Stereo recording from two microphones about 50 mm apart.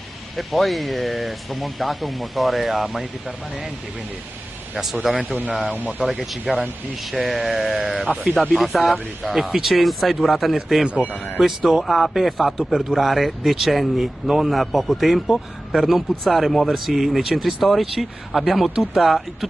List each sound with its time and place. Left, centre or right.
0.4 s a man's voice: centre
5.1 s speech: right
5.5 s a man's voice: centre